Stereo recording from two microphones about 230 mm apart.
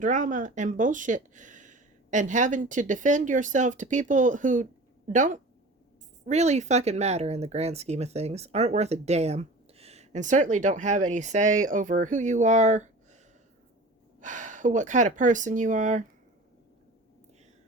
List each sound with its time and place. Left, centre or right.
0.0 s speech: right
14.2 s speech: right